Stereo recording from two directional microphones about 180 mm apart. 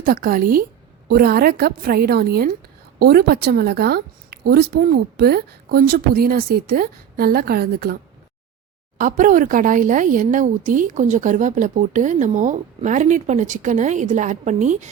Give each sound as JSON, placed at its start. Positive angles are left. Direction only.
{"t": 0.0, "sound": "a woman's voice", "side_deg": -50}
{"t": 9.0, "sound": "speech", "side_deg": -45}